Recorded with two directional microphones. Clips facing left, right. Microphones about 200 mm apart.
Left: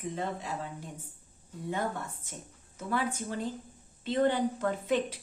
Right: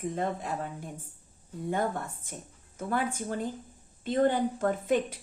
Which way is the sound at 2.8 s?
50° right (ahead or behind).